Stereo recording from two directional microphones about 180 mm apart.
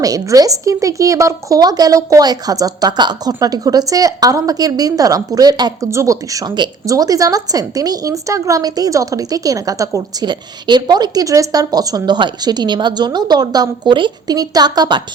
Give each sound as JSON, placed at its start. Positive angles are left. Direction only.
{"t": 0.0, "sound": "speech", "side_deg": -20}